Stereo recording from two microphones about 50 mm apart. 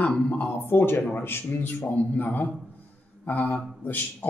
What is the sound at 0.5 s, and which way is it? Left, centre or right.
A man's voice, left.